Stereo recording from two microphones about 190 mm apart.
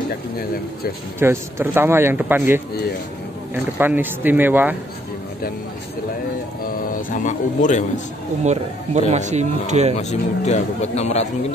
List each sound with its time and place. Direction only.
1.2 s speech: 10° right (ahead or behind)
3.7 s speech: 10° right (ahead or behind)
6.9 s a man's voice: 45° left (ahead or behind)
8.5 s speech: 35° right (ahead or behind)
9.9 s a man's voice: 35° left (ahead or behind)